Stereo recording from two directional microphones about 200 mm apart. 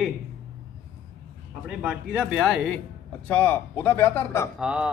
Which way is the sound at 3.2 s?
10° left (ahead or behind).